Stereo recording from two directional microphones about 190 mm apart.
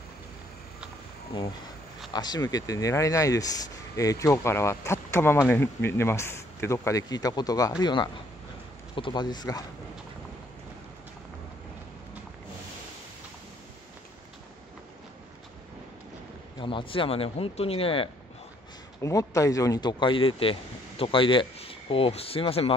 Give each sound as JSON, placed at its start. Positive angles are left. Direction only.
{"t": 2.1, "sound": "speech", "side_deg": 20}
{"t": 16.5, "sound": "speech", "side_deg": 25}
{"t": 18.9, "sound": "speech", "side_deg": 15}